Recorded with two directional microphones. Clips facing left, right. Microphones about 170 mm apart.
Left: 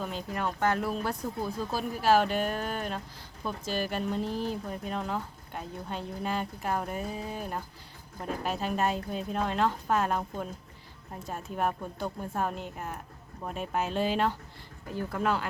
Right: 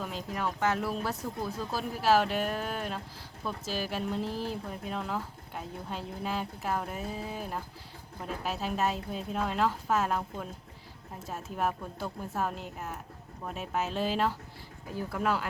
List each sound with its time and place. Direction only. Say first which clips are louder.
0.0 s speech: left 1 dB; centre (ahead or behind)